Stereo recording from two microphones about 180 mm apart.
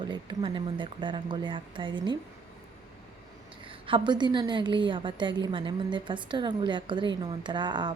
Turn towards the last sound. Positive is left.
turn(degrees=-25)  # may be behind; listen again after turning